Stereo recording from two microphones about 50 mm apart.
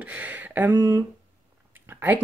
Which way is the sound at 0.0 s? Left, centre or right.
Right.